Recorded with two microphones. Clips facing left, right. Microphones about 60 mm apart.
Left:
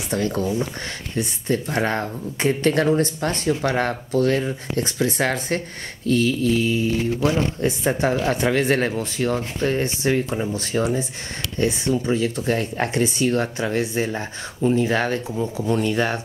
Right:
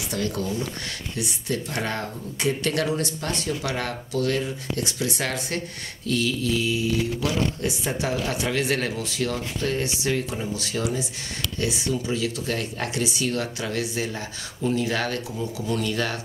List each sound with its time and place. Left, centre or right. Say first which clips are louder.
0.1 s speech: left 5 dB; left